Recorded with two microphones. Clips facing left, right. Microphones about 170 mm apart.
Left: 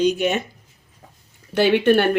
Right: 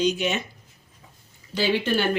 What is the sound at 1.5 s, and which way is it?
Speech, 65° left (ahead or behind).